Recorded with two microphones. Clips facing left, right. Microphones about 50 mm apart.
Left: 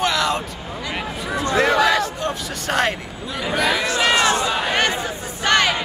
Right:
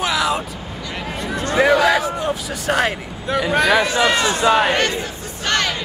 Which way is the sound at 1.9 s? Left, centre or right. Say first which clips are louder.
Right 2 dB; centre.